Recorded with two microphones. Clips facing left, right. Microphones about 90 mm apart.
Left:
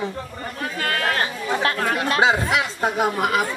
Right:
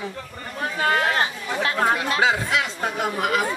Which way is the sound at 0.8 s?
25° right (ahead or behind).